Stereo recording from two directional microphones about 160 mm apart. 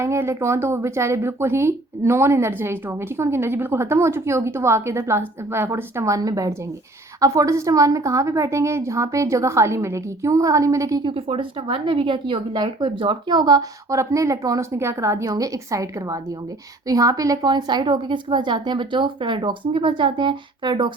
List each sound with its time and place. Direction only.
0.0 s a woman's voice: 15° right (ahead or behind)
11.1 s a woman's voice: 35° right (ahead or behind)